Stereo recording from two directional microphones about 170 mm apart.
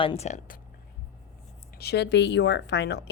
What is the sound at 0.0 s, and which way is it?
Speech, 35° left (ahead or behind).